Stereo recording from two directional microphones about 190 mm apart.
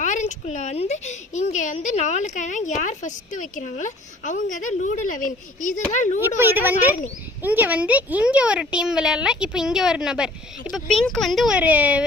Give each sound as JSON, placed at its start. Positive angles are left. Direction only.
{"t": 0.0, "sound": "speech", "side_deg": 40}
{"t": 6.2, "sound": "a woman's voice", "side_deg": -10}